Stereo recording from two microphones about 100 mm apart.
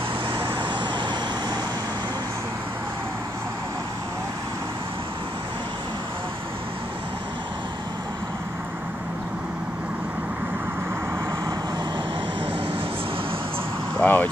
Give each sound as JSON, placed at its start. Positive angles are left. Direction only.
{"t": 0.3, "sound": "vehicle", "side_deg": -65}
{"t": 14.0, "sound": "vehicle", "side_deg": 20}